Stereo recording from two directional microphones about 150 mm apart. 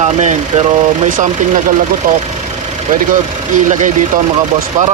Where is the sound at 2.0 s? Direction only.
70° right (ahead or behind).